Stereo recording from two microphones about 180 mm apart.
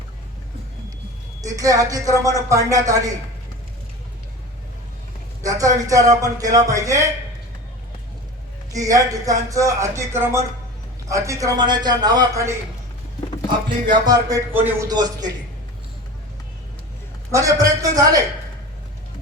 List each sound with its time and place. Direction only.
1.4 s speech: 20° right (ahead or behind)
5.4 s speech: 20° right (ahead or behind)
8.7 s speech: 20° right (ahead or behind)
14.0 s speech: 20° right (ahead or behind)
17.3 s speech: 20° right (ahead or behind)